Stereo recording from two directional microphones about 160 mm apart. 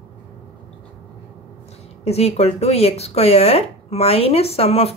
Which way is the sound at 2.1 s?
40° left (ahead or behind).